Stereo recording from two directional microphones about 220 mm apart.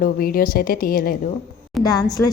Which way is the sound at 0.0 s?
40° left (ahead or behind).